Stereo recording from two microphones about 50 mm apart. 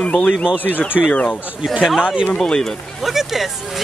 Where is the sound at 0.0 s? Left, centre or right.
Left.